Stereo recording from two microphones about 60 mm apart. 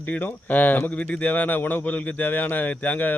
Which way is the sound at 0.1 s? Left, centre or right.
Left.